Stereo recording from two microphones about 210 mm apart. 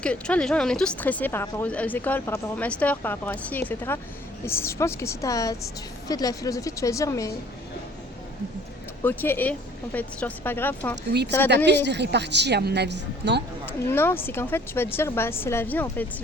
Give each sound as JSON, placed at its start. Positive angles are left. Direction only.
{"t": 0.0, "sound": "speech", "side_deg": 5}
{"t": 9.0, "sound": "speech", "side_deg": 10}
{"t": 11.4, "sound": "a woman's voice", "side_deg": -55}
{"t": 13.7, "sound": "speech", "side_deg": 10}